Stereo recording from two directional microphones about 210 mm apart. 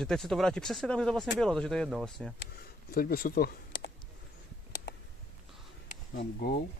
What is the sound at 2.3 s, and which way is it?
Speech, 45° left (ahead or behind).